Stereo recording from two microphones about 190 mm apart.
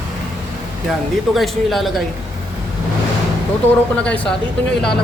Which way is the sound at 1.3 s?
Centre (ahead or behind).